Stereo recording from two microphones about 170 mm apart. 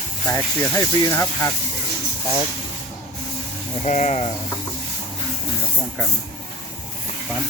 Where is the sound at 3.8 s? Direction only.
45° left (ahead or behind).